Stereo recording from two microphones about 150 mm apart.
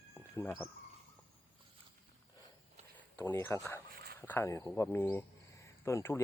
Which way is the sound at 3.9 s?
75° right (ahead or behind).